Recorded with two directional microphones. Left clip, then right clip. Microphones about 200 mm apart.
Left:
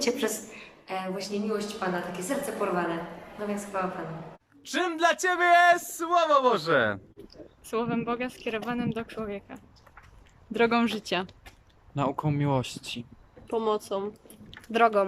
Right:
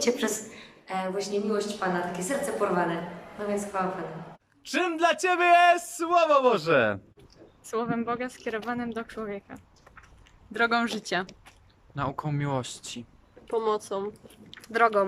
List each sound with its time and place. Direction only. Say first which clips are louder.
0.0 s a woman's voice: right 1 dB; centre (ahead or behind)